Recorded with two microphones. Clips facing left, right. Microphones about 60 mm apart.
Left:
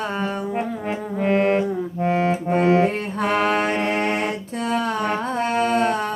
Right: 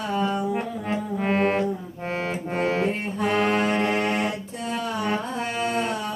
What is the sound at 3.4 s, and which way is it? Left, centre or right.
Mantra, left.